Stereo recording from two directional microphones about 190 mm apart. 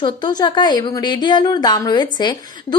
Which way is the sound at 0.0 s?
25° left (ahead or behind).